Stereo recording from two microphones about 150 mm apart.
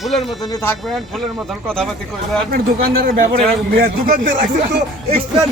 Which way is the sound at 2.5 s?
90° right.